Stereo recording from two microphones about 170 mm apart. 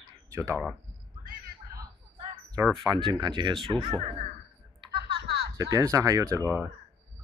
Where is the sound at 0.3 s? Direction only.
20° right (ahead or behind).